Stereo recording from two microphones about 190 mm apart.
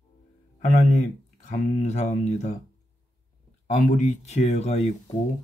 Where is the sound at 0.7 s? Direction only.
40° left (ahead or behind).